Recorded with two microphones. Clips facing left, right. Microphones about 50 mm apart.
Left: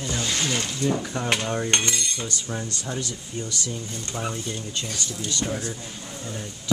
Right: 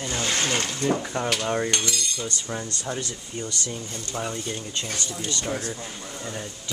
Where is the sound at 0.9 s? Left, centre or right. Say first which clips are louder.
Right 1 dB; centre.